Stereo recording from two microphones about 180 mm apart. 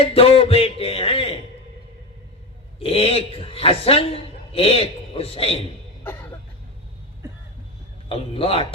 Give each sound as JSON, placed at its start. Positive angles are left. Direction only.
{"t": 0.0, "sound": "a man's voice", "side_deg": 35}
{"t": 2.7, "sound": "a man's voice", "side_deg": 35}
{"t": 6.0, "sound": "music", "side_deg": 10}
{"t": 8.1, "sound": "a man's voice", "side_deg": 30}